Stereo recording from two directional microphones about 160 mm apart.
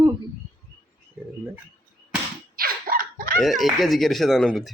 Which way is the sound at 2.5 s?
65° right (ahead or behind).